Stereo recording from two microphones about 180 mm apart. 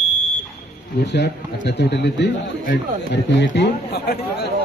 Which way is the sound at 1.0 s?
70° left (ahead or behind).